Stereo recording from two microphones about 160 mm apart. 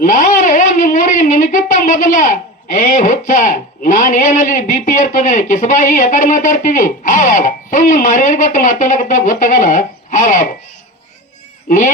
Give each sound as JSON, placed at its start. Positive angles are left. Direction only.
{"t": 0.0, "sound": "a woman's voice", "side_deg": 55}